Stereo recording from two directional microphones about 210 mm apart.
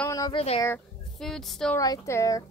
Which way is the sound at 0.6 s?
5° left (ahead or behind).